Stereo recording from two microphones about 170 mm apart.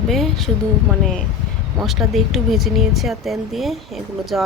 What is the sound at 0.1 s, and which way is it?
Speech, centre (ahead or behind).